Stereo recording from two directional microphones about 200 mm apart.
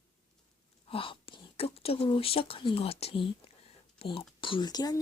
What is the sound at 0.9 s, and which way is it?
Speech, 25° left (ahead or behind).